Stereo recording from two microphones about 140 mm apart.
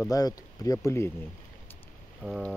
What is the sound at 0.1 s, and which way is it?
Speech, 25° left (ahead or behind).